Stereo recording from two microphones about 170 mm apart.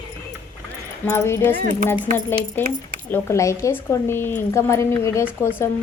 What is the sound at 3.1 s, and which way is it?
A woman's voice, 15° left (ahead or behind).